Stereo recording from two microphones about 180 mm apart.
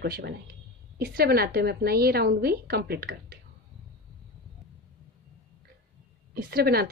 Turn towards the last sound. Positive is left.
turn(degrees=-60)  # may be behind; listen again after turning